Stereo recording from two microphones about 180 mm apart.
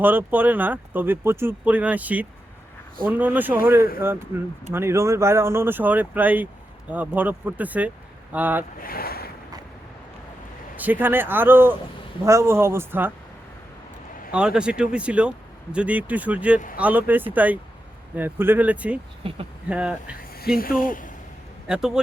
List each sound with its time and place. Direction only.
0.0 s speech: 10° right (ahead or behind)
8.8 s speech: 55° left (ahead or behind)
10.8 s speech: 10° right (ahead or behind)
14.3 s speech: 5° right (ahead or behind)
19.2 s speech: 30° right (ahead or behind)
19.7 s speech: 5° right (ahead or behind)
20.6 s speech: 50° left (ahead or behind)
21.7 s speech: 5° right (ahead or behind)